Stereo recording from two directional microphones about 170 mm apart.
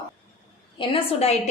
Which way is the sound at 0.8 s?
35° left (ahead or behind).